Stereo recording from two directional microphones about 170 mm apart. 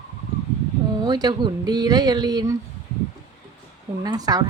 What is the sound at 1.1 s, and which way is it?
Speech, 25° right (ahead or behind).